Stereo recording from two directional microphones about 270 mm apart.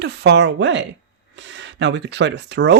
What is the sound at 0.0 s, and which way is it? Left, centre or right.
Speech, right.